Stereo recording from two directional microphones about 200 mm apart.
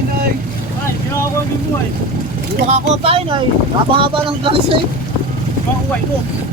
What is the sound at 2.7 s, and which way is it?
Speech, 30° right (ahead or behind).